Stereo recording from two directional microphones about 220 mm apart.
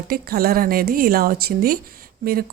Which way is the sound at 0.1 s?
45° right (ahead or behind).